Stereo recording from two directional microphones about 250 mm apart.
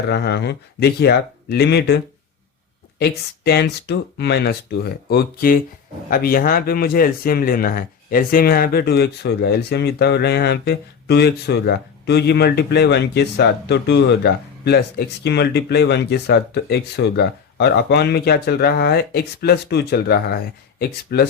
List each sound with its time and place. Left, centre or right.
0.1 s speech: left
3.0 s speech: left